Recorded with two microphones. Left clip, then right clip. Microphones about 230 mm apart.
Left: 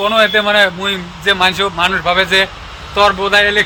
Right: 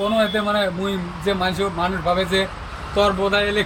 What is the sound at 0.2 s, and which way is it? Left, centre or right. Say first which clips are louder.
Speech: left 12 dB; left.